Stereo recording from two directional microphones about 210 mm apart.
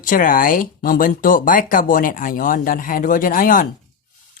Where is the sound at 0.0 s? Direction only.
40° left (ahead or behind).